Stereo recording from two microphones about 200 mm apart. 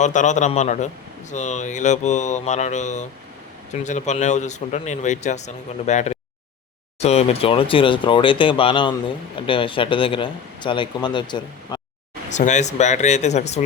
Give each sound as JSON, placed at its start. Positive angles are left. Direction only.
{"t": 0.0, "sound": "a man's voice", "side_deg": 35}
{"t": 12.3, "sound": "a man's voice", "side_deg": 35}